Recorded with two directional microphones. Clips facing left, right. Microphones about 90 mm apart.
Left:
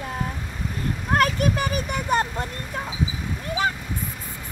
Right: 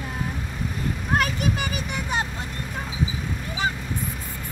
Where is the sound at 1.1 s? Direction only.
50° left (ahead or behind).